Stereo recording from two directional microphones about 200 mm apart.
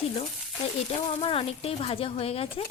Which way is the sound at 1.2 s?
30° left (ahead or behind).